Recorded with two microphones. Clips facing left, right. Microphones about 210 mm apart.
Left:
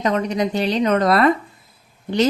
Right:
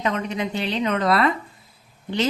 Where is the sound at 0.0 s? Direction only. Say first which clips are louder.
Left 5 dB; 40° left (ahead or behind).